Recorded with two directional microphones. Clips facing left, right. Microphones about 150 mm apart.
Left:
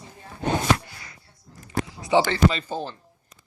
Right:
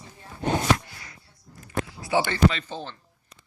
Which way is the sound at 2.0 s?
20° left (ahead or behind).